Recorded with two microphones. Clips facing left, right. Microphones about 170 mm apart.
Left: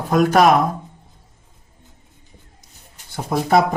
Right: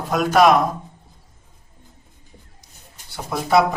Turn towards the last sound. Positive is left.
turn(degrees=45)  # may be behind; listen again after turning